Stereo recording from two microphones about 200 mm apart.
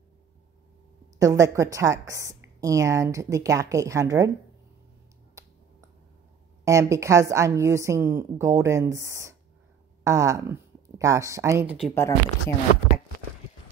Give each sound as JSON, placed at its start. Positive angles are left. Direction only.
{"t": 1.2, "sound": "a woman's voice", "side_deg": -15}
{"t": 6.6, "sound": "a woman's voice", "side_deg": -15}
{"t": 11.9, "sound": "speech", "side_deg": 15}